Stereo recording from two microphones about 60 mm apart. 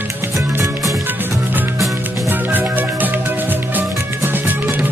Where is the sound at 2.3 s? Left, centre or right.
Right.